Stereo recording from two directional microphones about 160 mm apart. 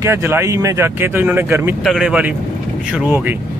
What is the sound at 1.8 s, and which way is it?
Speech, centre (ahead or behind).